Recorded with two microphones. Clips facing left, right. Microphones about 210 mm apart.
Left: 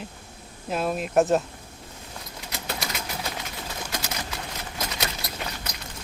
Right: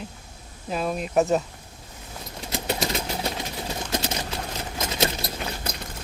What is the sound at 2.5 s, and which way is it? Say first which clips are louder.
Typewriter: right 6 dB; 25° right (ahead or behind).